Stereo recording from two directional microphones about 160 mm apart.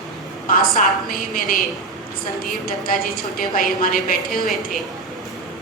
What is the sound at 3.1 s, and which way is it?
A woman's voice, 60° left (ahead or behind).